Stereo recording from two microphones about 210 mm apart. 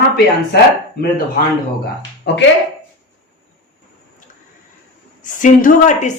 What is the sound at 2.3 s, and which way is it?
Speech, 55° left (ahead or behind).